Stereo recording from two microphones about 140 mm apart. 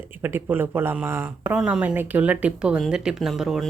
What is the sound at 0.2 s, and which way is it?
Speech, 15° right (ahead or behind).